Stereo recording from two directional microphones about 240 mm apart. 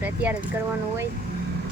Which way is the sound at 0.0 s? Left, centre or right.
Centre.